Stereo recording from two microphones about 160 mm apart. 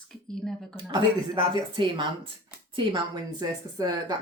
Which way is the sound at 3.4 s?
25° right (ahead or behind).